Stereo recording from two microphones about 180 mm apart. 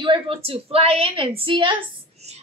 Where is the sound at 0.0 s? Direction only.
30° right (ahead or behind).